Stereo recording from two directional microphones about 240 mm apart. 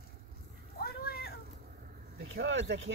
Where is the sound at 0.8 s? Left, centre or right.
Left.